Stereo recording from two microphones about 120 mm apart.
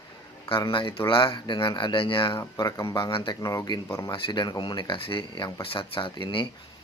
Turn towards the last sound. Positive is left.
turn(degrees=45)  # may be behind; listen again after turning